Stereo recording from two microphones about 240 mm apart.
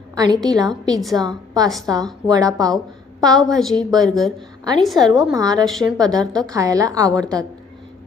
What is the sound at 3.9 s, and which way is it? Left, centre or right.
Speech, centre.